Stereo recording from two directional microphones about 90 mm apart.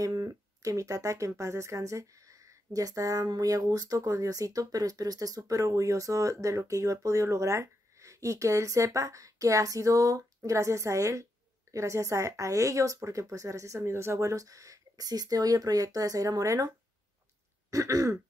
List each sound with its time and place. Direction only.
0.0 s speech: 40° right (ahead or behind)